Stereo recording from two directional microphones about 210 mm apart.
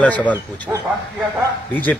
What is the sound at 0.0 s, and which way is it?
Speech, 5° left (ahead or behind).